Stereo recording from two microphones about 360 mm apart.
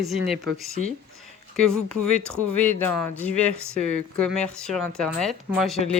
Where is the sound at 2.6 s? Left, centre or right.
Centre.